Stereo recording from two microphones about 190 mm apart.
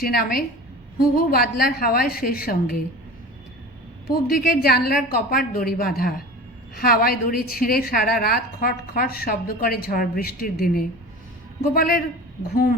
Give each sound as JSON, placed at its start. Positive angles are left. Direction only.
{"t": 0.0, "sound": "a woman's voice", "side_deg": 50}
{"t": 4.1, "sound": "a woman's voice", "side_deg": 55}